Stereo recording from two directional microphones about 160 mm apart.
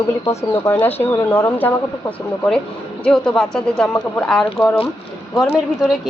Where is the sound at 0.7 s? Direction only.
15° left (ahead or behind).